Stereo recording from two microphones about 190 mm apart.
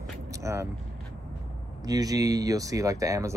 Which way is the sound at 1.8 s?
20° right (ahead or behind).